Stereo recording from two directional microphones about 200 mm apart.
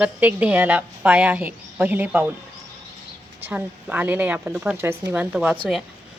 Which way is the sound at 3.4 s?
5° right (ahead or behind).